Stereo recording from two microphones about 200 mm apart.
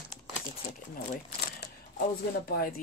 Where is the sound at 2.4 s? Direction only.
50° left (ahead or behind).